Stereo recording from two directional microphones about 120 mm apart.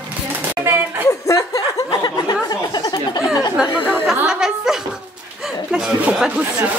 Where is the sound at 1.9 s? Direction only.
35° left (ahead or behind).